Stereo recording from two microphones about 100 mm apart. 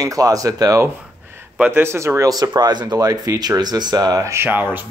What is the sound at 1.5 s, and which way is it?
Speech, 20° right (ahead or behind).